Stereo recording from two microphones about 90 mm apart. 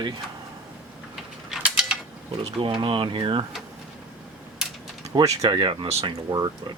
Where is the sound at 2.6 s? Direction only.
70° right (ahead or behind).